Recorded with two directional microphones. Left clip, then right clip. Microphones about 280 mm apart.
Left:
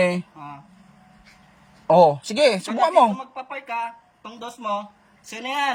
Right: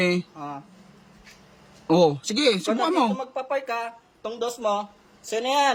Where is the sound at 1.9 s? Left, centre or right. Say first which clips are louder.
Left 5 dB; centre.